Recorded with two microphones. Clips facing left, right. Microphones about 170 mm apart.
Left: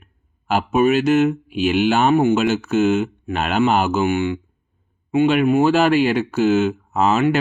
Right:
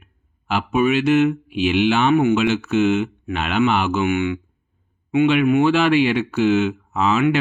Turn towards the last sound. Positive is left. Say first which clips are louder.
# left 1 dB
turn(degrees=40)  # may be behind; listen again after turning